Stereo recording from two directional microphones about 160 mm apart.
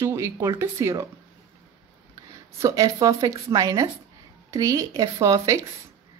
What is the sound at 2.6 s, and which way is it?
Speech, 20° right (ahead or behind).